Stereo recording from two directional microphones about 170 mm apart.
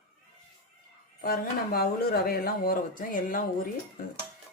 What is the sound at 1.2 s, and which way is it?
Speech, 60° left (ahead or behind).